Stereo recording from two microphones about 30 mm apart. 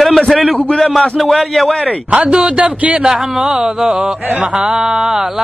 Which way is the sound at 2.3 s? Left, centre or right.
Right.